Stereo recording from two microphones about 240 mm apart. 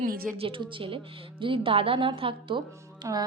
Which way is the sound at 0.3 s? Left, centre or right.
Right.